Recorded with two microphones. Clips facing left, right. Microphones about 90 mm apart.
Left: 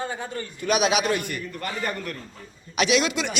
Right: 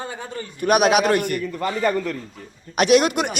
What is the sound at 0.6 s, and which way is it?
Speech, 55° right (ahead or behind).